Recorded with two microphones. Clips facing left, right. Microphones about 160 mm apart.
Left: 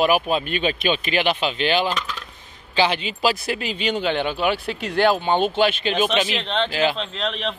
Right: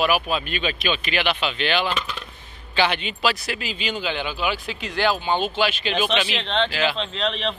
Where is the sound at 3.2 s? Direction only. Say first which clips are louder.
Left 3 dB; 40° left (ahead or behind).